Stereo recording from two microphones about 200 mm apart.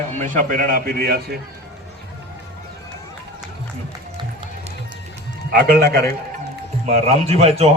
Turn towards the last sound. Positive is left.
turn(degrees=-30)  # may be behind; listen again after turning